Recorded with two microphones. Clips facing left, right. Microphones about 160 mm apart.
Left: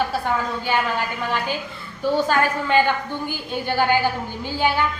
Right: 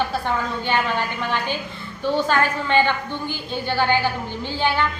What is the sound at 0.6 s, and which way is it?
A woman's voice, 5° left (ahead or behind).